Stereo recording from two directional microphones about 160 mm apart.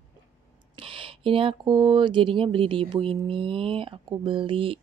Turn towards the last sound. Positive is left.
turn(degrees=-35)  # may be behind; listen again after turning